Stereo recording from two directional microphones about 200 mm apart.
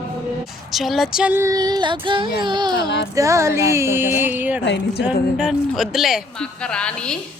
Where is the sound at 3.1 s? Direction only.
15° right (ahead or behind).